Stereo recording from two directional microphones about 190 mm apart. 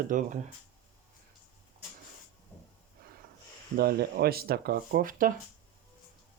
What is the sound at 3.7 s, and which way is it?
Speech, 55° right (ahead or behind).